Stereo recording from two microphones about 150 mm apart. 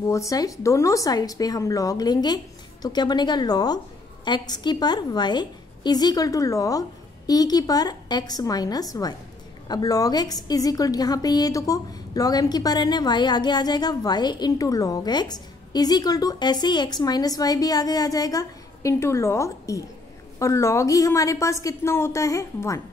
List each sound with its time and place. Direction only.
0.1 s a woman's voice: 20° left (ahead or behind)